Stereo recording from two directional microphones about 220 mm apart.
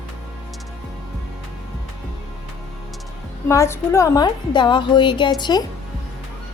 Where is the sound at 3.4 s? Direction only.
10° left (ahead or behind).